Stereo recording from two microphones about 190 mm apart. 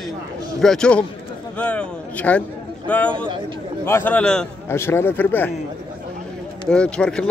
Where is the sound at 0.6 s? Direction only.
5° left (ahead or behind).